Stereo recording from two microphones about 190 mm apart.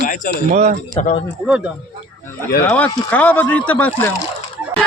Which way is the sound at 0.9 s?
35° left (ahead or behind).